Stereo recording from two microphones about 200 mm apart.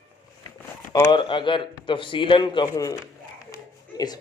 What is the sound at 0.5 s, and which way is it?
Speech, 20° left (ahead or behind).